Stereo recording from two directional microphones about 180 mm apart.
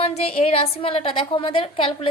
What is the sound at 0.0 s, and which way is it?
A woman's voice, 35° left (ahead or behind).